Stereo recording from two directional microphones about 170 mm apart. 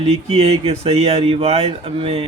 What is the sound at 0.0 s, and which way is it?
Speech, 35° right (ahead or behind).